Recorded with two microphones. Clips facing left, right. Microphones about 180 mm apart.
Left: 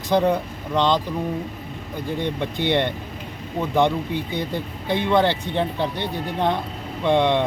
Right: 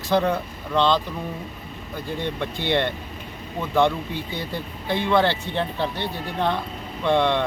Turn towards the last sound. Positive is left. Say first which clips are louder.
# left 2 dB
turn(degrees=15)  # may be behind; listen again after turning